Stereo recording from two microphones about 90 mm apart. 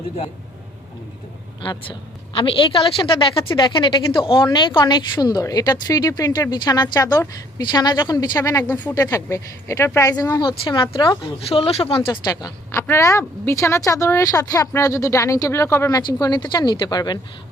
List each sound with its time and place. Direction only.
1.6 s a woman's voice: 70° left (ahead or behind)
3.6 s speech: 65° left (ahead or behind)
4.4 s speech: 55° left (ahead or behind); by 8.7 s 40° left (ahead or behind)
8.7 s speech: 20° left (ahead or behind)
9.0 s speech: 40° left (ahead or behind)
10.1 s speech: 45° left (ahead or behind)
10.7 s speech: 65° left (ahead or behind)
11.2 s speech: 90° left
12.2 s speech: 40° left (ahead or behind)
15.9 s speech: 50° left (ahead or behind)